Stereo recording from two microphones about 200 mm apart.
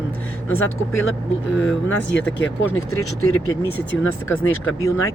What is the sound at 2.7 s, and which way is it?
Speech, 90° left.